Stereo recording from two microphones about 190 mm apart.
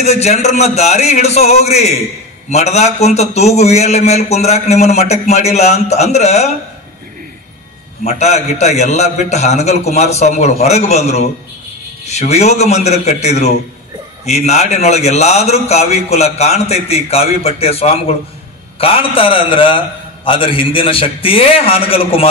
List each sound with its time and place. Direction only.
0.0 s a man's voice: 35° left (ahead or behind)
8.0 s a man's voice: 35° left (ahead or behind)